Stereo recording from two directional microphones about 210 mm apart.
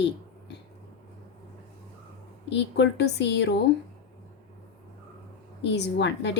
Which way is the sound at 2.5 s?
55° left (ahead or behind).